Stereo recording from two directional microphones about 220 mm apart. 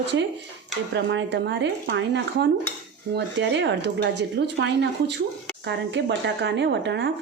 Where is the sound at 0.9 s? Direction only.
50° right (ahead or behind).